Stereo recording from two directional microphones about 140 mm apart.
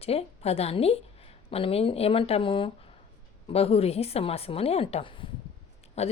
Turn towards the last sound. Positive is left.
turn(degrees=50)  # may be behind; listen again after turning